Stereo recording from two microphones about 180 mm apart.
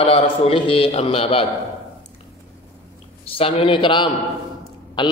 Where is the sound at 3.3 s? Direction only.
30° left (ahead or behind).